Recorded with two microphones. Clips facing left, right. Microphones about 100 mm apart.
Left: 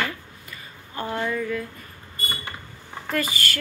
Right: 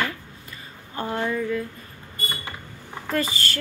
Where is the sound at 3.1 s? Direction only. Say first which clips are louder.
Right 1 dB; 30° right (ahead or behind).